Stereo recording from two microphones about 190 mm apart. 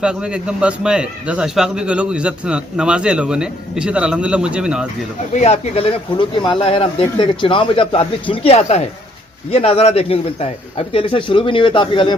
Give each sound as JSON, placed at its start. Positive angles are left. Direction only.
{"t": 0.0, "sound": "a man's voice", "side_deg": -5}
{"t": 5.3, "sound": "speech", "side_deg": 35}